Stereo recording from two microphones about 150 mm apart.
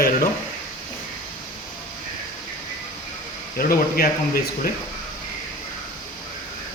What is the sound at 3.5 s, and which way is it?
Speech, 80° left.